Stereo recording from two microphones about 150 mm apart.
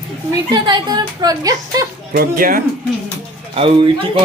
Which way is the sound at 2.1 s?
75° right (ahead or behind).